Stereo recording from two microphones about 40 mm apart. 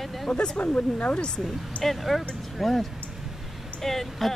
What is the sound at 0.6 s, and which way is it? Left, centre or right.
Speech, left.